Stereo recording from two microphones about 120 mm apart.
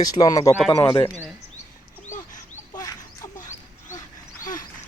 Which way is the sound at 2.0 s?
90° left.